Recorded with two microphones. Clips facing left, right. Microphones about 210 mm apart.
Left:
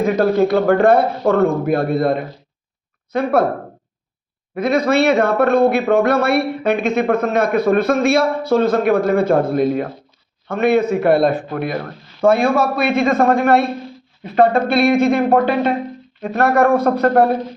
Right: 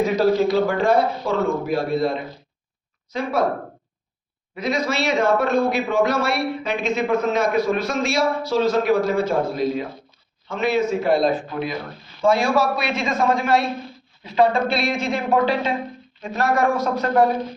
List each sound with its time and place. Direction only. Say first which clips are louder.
0.0 s speech: left 3 dB; 55° left (ahead or behind)
4.5 s speech: left 8 dB; 55° left (ahead or behind)